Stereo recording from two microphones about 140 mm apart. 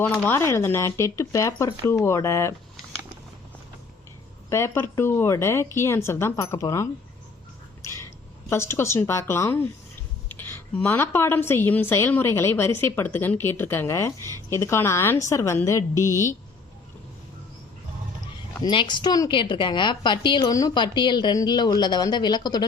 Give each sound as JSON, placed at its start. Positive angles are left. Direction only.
{"t": 0.0, "sound": "a woman's voice", "side_deg": 10}
{"t": 4.4, "sound": "a woman's voice", "side_deg": 20}
{"t": 18.6, "sound": "a woman's voice", "side_deg": 35}